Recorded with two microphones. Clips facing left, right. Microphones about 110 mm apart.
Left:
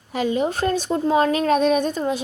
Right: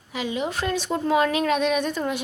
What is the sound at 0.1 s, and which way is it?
Speech, 45° left (ahead or behind).